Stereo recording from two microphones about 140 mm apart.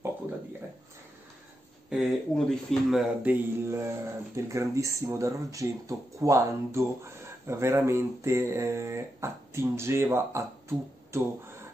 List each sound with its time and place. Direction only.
1.9 s speech: centre (ahead or behind)
3.3 s speech: 20° right (ahead or behind)